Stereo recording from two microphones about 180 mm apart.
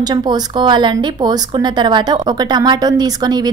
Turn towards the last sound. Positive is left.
turn(degrees=-20)  # may be behind; listen again after turning